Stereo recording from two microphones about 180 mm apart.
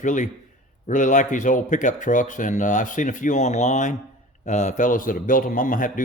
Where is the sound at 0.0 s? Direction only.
45° left (ahead or behind).